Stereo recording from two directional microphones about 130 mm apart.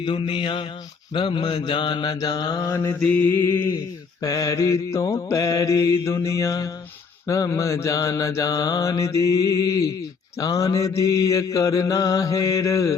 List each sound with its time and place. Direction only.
0.0 s mantra: 40° left (ahead or behind)
2.6 s mantra: 20° left (ahead or behind)
10.3 s mantra: 25° left (ahead or behind)